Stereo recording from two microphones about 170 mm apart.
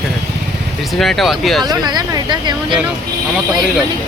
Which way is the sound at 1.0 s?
Centre (ahead or behind).